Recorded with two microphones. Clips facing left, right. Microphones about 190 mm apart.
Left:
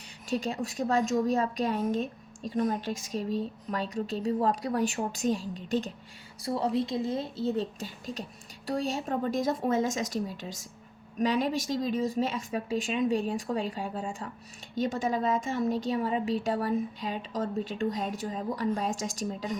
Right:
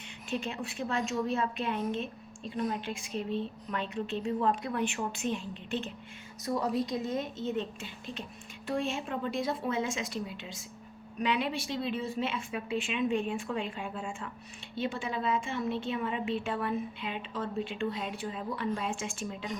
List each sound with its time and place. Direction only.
0.3 s a woman's voice: 40° left (ahead or behind)